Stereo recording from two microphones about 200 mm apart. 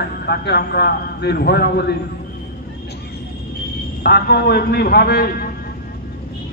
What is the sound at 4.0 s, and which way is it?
A man's voice, 50° left (ahead or behind).